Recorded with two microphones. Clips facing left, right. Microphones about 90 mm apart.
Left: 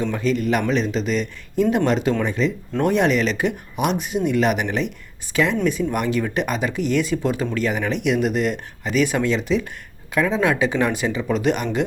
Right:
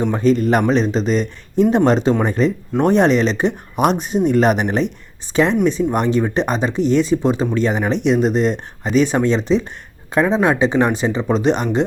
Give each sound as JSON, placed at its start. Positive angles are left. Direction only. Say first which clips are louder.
{"t": 0.0, "sound": "speech", "louder": "right 6 dB", "side_deg": -35}